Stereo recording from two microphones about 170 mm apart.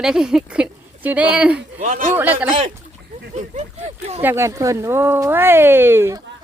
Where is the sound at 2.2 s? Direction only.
10° right (ahead or behind).